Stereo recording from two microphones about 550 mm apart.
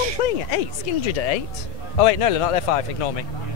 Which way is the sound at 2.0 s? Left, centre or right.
Left.